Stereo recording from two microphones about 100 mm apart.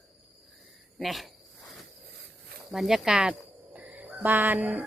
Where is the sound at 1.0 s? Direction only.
Centre (ahead or behind).